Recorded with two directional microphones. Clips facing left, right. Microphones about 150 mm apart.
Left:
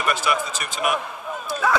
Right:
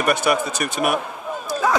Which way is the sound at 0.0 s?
45° right (ahead or behind).